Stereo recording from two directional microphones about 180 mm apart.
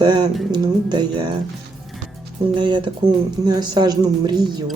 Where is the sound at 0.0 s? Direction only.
25° right (ahead or behind).